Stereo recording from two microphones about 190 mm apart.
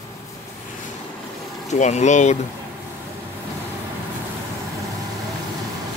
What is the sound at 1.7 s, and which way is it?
Speech, 35° left (ahead or behind).